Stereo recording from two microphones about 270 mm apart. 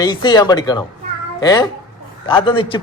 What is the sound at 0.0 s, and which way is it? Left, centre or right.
A man's voice, centre.